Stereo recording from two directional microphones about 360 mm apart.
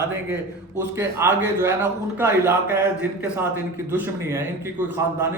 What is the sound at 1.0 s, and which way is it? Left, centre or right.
A man's voice, centre.